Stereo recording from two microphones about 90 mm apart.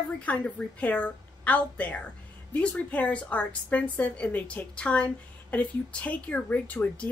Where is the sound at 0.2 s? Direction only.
15° left (ahead or behind).